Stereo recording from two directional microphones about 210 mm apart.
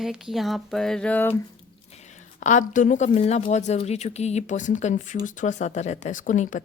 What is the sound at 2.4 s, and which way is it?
Speech, 35° left (ahead or behind).